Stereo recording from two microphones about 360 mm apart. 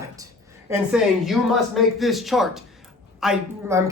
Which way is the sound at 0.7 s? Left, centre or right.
Centre.